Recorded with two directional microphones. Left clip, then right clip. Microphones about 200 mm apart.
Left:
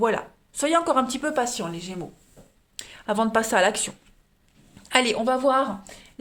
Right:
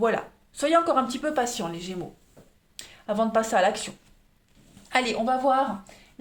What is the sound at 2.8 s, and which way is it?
A woman's voice, 40° left (ahead or behind).